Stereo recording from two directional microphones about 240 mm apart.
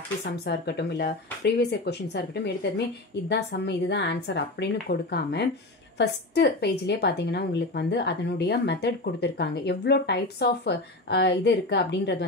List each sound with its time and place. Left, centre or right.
0.2 s a woman's voice: left